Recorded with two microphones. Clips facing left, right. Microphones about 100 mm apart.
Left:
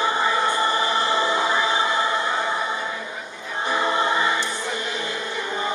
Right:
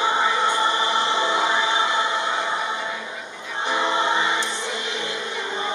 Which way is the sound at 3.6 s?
25° right (ahead or behind).